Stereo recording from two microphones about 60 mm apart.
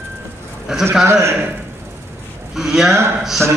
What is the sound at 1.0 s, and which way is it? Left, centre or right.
Speech, right.